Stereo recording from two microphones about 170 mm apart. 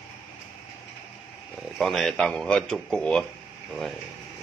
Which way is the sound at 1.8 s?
Centre (ahead or behind).